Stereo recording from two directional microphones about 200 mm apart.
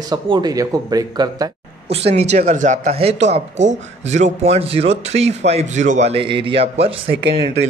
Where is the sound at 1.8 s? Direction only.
30° right (ahead or behind).